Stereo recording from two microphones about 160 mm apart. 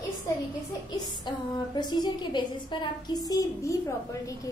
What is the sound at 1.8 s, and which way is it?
A woman's voice, 25° left (ahead or behind).